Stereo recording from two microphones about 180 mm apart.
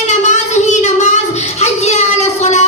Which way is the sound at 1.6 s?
40° left (ahead or behind).